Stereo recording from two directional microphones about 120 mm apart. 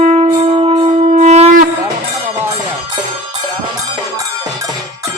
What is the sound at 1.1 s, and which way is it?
Shofar, 70° right (ahead or behind).